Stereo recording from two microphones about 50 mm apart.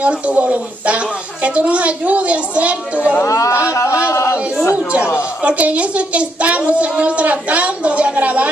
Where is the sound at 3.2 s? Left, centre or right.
Left.